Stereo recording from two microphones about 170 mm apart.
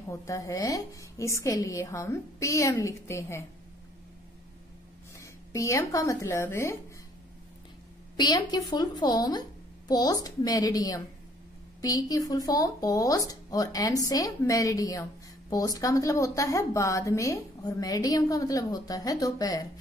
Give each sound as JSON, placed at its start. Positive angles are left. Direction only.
{"t": 0.1, "sound": "a woman's voice", "side_deg": 20}
{"t": 5.1, "sound": "speech", "side_deg": 15}
{"t": 8.2, "sound": "a woman's voice", "side_deg": 25}